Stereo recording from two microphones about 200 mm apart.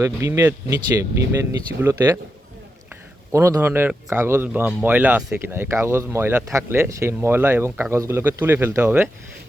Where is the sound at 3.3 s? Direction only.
15° right (ahead or behind).